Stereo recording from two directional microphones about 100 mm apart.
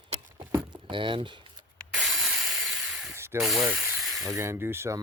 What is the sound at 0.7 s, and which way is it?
Speech, 55° right (ahead or behind).